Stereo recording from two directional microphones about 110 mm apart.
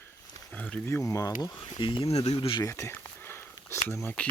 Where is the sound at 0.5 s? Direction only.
15° left (ahead or behind); by 2.1 s 50° left (ahead or behind).